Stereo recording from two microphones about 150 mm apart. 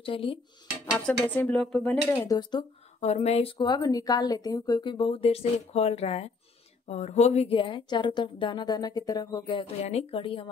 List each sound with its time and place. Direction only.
0.0 s speech: 35° left (ahead or behind)
0.9 s speech: 10° left (ahead or behind)
2.2 s speech: 25° left (ahead or behind)
3.0 s speech: 50° left (ahead or behind)